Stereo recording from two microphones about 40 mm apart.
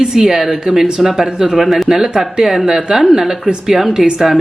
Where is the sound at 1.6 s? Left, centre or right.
Centre.